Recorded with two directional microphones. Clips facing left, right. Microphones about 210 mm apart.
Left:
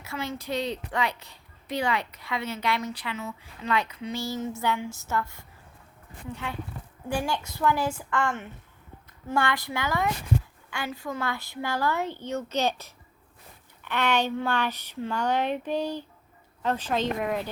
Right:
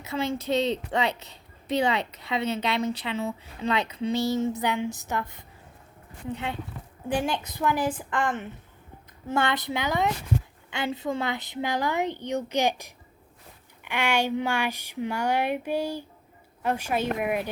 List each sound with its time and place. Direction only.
0.0 s a child's voice: 20° right (ahead or behind)